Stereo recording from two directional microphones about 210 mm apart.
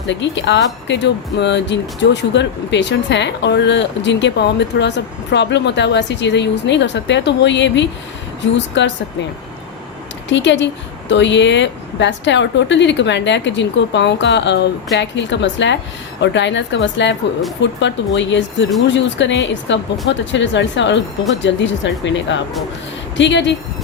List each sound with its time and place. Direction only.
0.1 s speech: 55° left (ahead or behind)
10.2 s speech: 60° left (ahead or behind)